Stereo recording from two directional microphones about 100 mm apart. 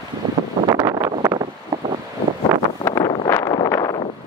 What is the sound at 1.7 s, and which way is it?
Wind, 40° right (ahead or behind).